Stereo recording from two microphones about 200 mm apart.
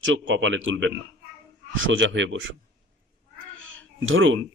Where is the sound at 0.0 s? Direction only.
70° right (ahead or behind).